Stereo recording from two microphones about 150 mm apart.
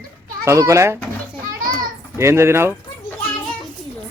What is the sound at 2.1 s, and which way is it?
Speech, 15° right (ahead or behind).